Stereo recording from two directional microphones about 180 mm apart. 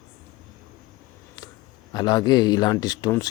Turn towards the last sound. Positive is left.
turn(degrees=20)  # may be behind; listen again after turning